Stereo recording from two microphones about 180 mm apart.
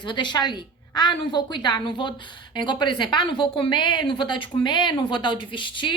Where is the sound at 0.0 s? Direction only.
25° left (ahead or behind).